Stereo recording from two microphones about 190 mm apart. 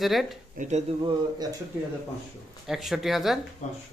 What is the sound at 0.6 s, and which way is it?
Speech, 35° right (ahead or behind).